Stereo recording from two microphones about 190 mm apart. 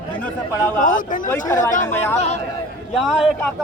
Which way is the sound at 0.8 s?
45° left (ahead or behind).